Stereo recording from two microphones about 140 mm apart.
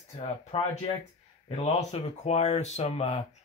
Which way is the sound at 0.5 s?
45° left (ahead or behind).